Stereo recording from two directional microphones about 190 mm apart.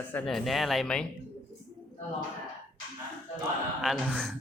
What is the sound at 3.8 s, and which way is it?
Speech, centre (ahead or behind).